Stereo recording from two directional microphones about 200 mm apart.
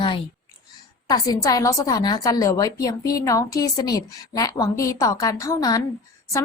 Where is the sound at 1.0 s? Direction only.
20° left (ahead or behind).